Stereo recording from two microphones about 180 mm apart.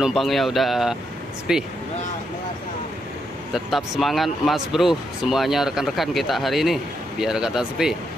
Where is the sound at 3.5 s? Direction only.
Centre (ahead or behind).